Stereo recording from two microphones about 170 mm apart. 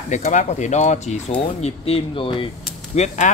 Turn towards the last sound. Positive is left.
turn(degrees=45)  # may be behind; listen again after turning